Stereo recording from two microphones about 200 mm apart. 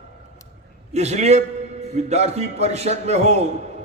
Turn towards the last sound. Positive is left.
turn(degrees=-35)  # may be behind; listen again after turning